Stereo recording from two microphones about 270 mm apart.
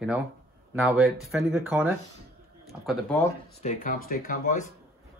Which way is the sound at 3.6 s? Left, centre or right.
Left.